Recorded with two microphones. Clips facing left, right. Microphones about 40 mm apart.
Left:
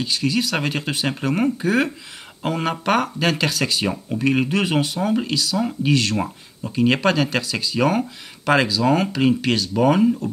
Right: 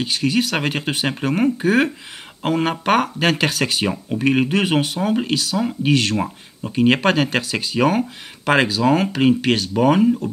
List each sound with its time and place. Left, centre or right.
0.0 s speech: right; by 1.5 s centre
1.6 s speech: right
8.8 s speech: centre